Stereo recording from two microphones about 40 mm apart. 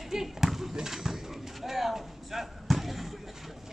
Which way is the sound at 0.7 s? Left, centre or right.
Centre.